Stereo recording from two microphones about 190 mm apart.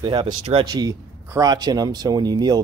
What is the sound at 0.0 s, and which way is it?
Speech, 25° right (ahead or behind).